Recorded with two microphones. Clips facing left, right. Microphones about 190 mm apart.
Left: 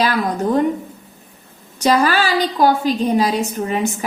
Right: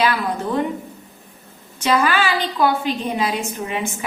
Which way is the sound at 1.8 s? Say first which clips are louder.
Left 3 dB; 40° left (ahead or behind).